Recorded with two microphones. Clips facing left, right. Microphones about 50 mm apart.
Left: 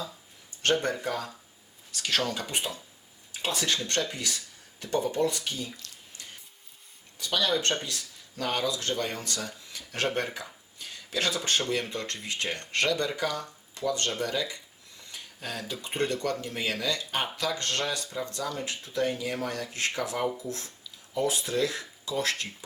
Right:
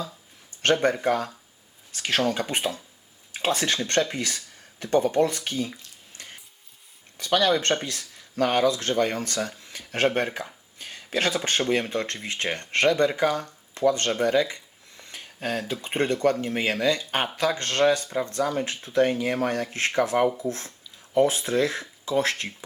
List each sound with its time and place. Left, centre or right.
0.6 s speech: right
6.2 s a sound: right
7.2 s speech: right